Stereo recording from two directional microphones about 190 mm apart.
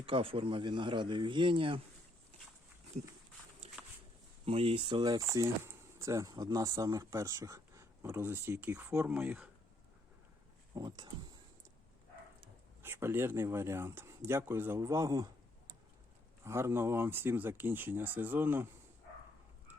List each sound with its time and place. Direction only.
0.0 s speech: 30° right (ahead or behind)
4.4 s speech: 30° right (ahead or behind); by 9.5 s 10° right (ahead or behind)
10.8 s speech: 20° right (ahead or behind)
12.8 s speech: 10° right (ahead or behind)
16.4 s speech: 15° right (ahead or behind)